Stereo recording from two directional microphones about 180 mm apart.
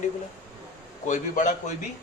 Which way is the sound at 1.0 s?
45° left (ahead or behind).